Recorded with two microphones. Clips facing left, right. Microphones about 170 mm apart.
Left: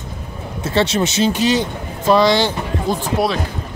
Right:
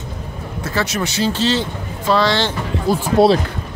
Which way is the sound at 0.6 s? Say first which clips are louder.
Left 4 dB; 30° left (ahead or behind).